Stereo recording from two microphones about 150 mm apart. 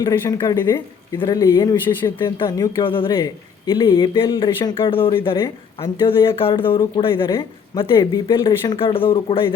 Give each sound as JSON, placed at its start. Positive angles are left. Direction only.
{"t": 0.0, "sound": "speech", "side_deg": 25}
{"t": 2.2, "sound": "speech", "side_deg": 30}